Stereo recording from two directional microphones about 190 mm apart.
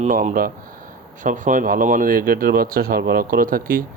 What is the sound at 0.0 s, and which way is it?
Speech, 40° right (ahead or behind).